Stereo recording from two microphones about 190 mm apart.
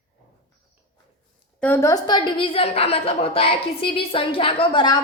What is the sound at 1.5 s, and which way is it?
A woman's voice, 10° left (ahead or behind).